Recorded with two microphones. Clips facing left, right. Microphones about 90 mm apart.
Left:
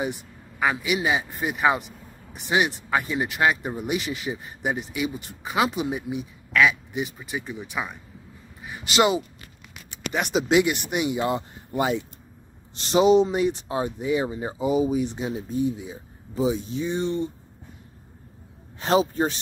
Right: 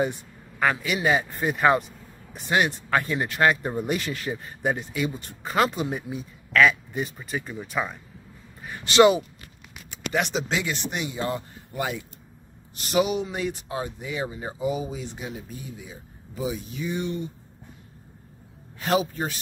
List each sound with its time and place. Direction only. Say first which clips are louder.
0.6 s speech: even; 10° left (ahead or behind)
10.1 s speech: left 1 dB; 5° left (ahead or behind)
10.5 s speech: left 7 dB; 15° left (ahead or behind); by 17.3 s 30° left (ahead or behind)
18.8 s speech: left 3 dB; 25° left (ahead or behind)